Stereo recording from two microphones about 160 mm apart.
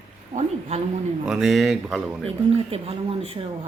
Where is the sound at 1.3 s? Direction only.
Centre (ahead or behind).